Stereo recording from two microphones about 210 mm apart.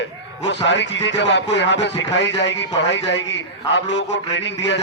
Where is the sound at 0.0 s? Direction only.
60° left (ahead or behind).